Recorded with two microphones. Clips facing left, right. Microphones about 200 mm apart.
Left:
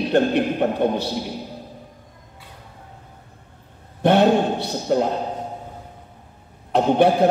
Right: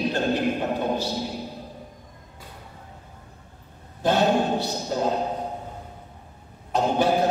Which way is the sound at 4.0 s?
60° left (ahead or behind).